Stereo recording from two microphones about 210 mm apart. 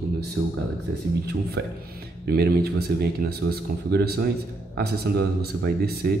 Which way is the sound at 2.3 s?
50° right (ahead or behind).